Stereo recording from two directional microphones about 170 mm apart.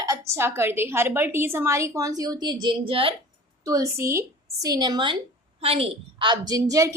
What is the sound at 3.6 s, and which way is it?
A woman's voice, 20° right (ahead or behind).